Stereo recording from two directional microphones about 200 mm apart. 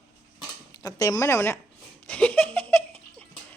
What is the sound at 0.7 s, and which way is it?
Speech, 15° left (ahead or behind).